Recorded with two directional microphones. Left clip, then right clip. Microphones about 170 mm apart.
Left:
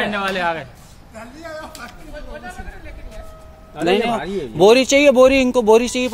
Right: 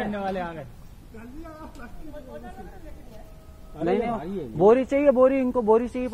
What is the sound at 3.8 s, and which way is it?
Speech, 30° left (ahead or behind).